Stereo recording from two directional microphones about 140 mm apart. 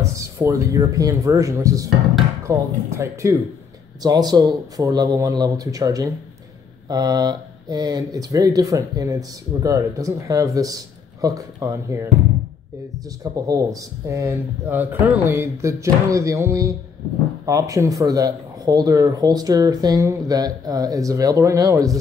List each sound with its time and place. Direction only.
0.0 s speech: 20° right (ahead or behind)
13.2 s speech: 25° right (ahead or behind)